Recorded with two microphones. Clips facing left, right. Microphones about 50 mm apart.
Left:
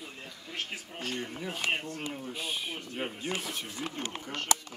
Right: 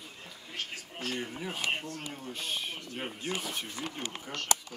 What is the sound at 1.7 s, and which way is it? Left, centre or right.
Speech, left.